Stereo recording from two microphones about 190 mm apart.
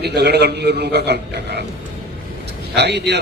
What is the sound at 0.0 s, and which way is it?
A man's voice, 60° right (ahead or behind).